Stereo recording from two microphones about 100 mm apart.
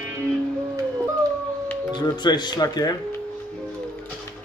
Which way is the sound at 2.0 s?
45° left (ahead or behind).